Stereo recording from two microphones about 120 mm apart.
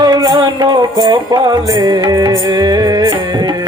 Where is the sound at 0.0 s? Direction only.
35° right (ahead or behind).